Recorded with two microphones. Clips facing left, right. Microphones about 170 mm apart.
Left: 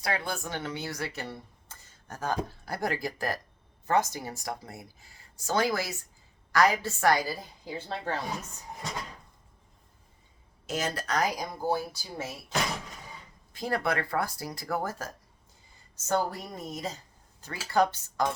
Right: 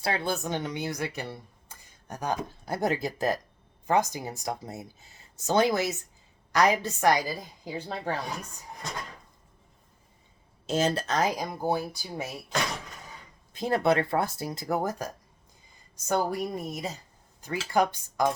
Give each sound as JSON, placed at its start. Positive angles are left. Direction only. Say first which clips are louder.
{"t": 0.0, "sound": "speech", "louder": "right 3 dB", "side_deg": -30}
{"t": 10.7, "sound": "speech", "louder": "right 5 dB", "side_deg": -30}
{"t": 13.5, "sound": "a woman's voice", "louder": "right 5 dB", "side_deg": -25}